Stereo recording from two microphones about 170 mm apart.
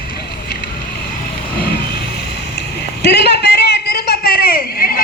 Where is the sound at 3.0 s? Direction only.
75° left (ahead or behind).